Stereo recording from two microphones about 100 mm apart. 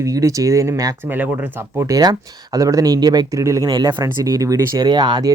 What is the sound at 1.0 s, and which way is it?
Speech, 20° right (ahead or behind).